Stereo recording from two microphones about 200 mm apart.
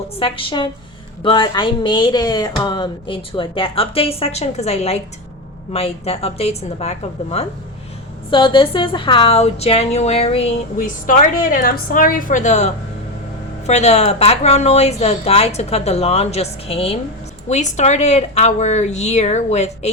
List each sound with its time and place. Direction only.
0.2 s a woman's voice: 25° left (ahead or behind)